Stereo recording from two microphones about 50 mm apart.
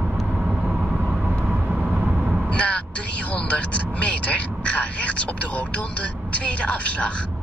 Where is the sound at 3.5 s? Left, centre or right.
Left.